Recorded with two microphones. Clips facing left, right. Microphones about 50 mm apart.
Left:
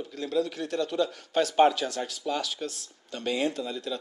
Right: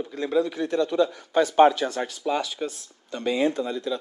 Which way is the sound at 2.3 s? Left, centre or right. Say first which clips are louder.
Right 5 dB; right.